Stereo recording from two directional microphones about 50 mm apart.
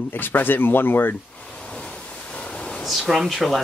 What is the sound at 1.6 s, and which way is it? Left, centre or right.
Waves, centre.